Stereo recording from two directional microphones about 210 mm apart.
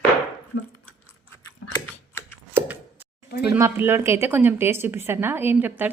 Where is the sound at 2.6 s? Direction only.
10° right (ahead or behind).